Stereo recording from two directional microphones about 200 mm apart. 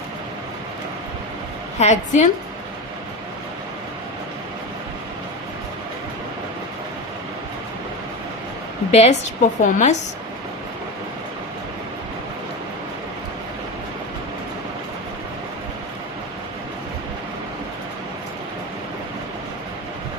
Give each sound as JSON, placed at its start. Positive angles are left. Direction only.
{"t": 1.8, "sound": "a woman's voice", "side_deg": 35}
{"t": 8.9, "sound": "a woman's voice", "side_deg": 35}